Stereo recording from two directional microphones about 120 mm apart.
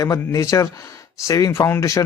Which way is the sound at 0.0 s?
25° left (ahead or behind).